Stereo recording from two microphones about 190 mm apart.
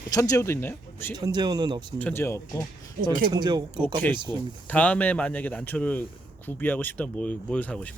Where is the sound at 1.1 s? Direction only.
20° right (ahead or behind).